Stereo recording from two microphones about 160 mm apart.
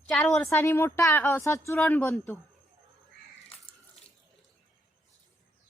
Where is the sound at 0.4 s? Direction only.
15° left (ahead or behind).